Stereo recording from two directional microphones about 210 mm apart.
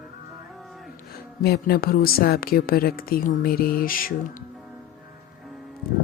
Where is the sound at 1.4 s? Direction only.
45° left (ahead or behind).